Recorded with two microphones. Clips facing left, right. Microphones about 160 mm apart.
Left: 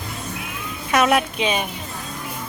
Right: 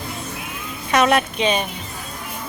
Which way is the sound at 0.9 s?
5° left (ahead or behind).